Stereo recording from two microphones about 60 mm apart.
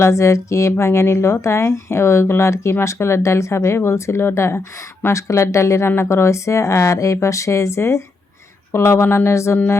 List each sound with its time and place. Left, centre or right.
0.0 s a woman's voice: left